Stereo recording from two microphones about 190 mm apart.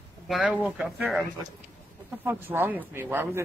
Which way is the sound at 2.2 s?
10° right (ahead or behind).